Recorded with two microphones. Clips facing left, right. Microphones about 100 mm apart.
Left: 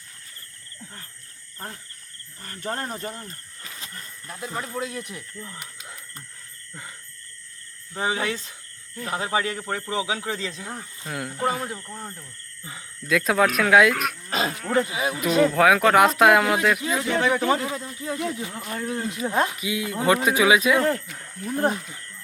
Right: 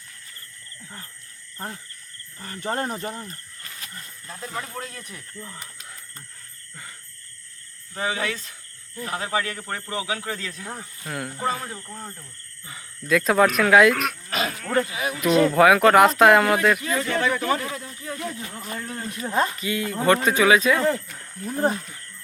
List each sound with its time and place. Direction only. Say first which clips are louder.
1.5 s speech: right 3 dB; 20° right (ahead or behind)
4.3 s speech: left 1 dB; 10° left (ahead or behind)
7.9 s a man's voice: left 1 dB; 25° left (ahead or behind)
9.0 s speech: left 1 dB; 5° left (ahead or behind)
9.2 s a man's voice: left 2 dB; 20° left (ahead or behind)
11.1 s speech: left 1 dB; centre (ahead or behind)
11.4 s speech: left 2 dB; 15° left (ahead or behind)
13.1 s speech: right 2 dB; centre (ahead or behind)
14.3 s wild animals: left 3 dB; 30° left (ahead or behind)
14.6 s a man's voice: left 1 dB; 15° left (ahead or behind)
15.2 s speech: right 2 dB; centre (ahead or behind)
16.8 s speech: left 1 dB; 15° left (ahead or behind)